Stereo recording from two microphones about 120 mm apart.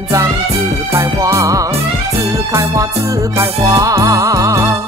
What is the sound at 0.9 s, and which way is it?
Music, 25° right (ahead or behind).